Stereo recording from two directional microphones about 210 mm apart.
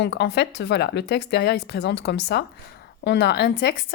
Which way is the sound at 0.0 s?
55° left (ahead or behind).